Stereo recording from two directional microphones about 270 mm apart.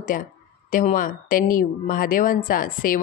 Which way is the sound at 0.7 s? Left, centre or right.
Left.